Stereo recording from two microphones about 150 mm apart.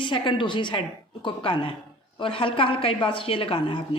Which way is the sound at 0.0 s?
35° left (ahead or behind).